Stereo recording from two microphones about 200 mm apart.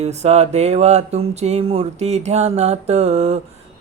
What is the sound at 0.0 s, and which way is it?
Speech, 35° right (ahead or behind).